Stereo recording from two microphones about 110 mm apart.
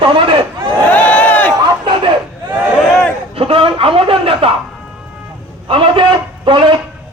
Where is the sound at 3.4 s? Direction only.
55° right (ahead or behind).